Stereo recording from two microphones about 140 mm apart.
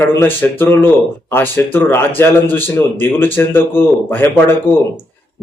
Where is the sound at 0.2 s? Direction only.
15° left (ahead or behind).